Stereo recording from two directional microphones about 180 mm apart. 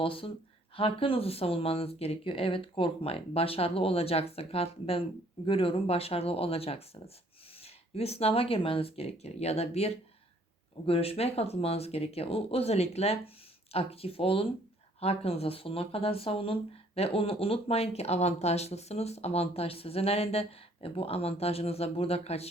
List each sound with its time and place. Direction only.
0.0 s speech: 30° left (ahead or behind)